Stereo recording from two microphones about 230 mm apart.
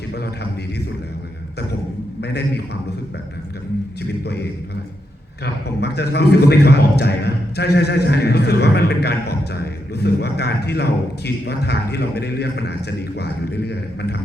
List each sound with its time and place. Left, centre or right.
5.6 s a man's voice: left